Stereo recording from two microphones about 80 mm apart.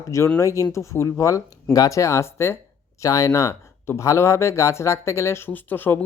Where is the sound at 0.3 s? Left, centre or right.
Left.